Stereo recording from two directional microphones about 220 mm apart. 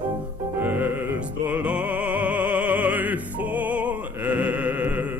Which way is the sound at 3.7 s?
5° right (ahead or behind).